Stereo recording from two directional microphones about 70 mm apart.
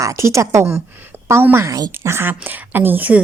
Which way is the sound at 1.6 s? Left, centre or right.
Right.